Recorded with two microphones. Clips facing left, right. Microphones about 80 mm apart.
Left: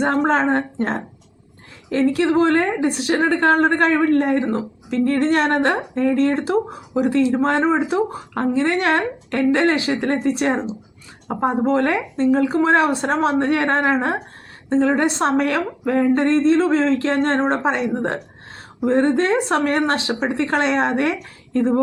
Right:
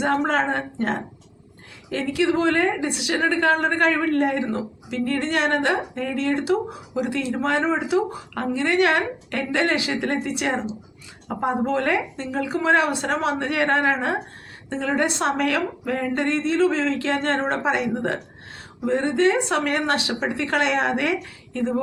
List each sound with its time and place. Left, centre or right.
0.0 s speech: left